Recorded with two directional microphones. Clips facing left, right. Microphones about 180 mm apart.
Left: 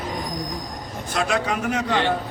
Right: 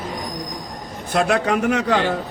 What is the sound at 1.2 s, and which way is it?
Speech, 60° right (ahead or behind).